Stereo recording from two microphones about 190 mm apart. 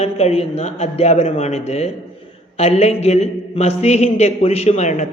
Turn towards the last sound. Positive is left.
turn(degrees=35)  # may be behind; listen again after turning